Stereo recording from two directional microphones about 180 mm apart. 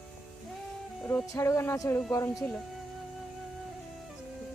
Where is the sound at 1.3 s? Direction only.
15° left (ahead or behind).